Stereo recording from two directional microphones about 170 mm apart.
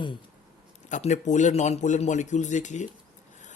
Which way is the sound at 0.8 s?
45° left (ahead or behind).